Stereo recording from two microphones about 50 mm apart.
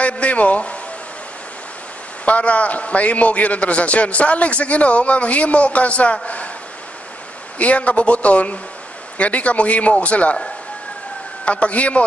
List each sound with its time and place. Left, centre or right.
0.0 s a sound: left
2.2 s a man's voice: left
7.5 s a man's voice: left